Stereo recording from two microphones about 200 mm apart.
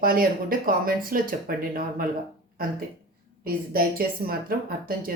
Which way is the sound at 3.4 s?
50° right (ahead or behind).